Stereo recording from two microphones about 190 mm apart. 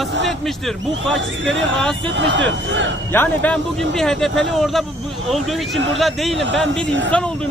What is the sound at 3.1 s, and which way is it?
Speech, 10° left (ahead or behind).